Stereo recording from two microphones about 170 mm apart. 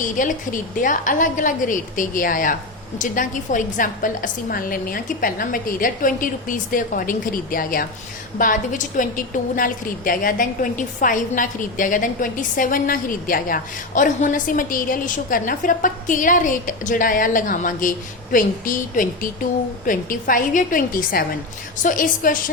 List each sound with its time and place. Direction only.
0.0 s a woman's voice: 50° left (ahead or behind)